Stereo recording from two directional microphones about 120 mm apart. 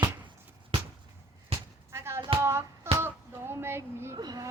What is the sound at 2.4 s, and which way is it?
Music, 20° right (ahead or behind).